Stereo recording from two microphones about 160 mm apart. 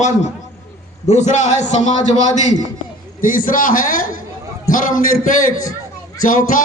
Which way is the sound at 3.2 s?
60° left (ahead or behind).